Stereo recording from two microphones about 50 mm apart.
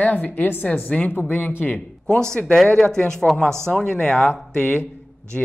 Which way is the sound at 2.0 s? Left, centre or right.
Centre.